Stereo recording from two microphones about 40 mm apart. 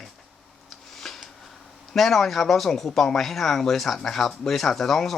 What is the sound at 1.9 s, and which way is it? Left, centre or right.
Speech, centre.